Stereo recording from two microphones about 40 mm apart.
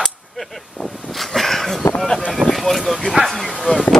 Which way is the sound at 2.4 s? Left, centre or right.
Centre.